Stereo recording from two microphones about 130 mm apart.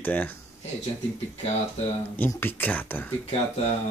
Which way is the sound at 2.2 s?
15° left (ahead or behind).